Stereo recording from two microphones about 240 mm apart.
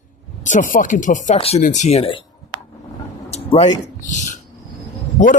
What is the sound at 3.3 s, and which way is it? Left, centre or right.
Speech, left.